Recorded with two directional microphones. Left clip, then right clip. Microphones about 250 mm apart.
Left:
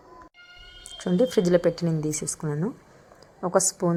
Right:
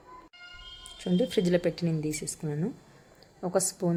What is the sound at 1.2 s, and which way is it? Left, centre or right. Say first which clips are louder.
Speech: left 6 dB; centre.